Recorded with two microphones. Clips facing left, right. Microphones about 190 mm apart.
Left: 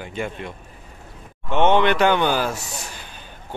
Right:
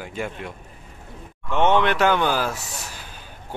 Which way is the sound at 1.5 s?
Centre (ahead or behind).